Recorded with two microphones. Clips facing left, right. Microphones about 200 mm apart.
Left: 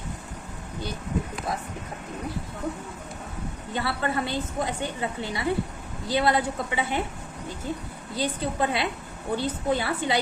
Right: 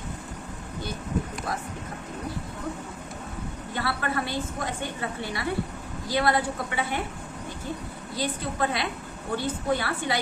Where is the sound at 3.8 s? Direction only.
20° left (ahead or behind).